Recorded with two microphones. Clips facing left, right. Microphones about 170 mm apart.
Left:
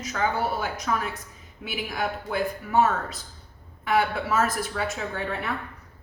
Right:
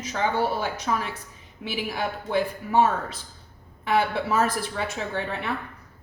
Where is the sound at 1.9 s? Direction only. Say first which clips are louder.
Right 2 dB; 30° right (ahead or behind).